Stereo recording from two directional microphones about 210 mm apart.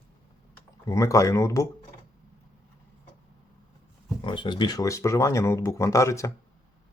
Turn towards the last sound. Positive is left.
turn(degrees=15)  # may be behind; listen again after turning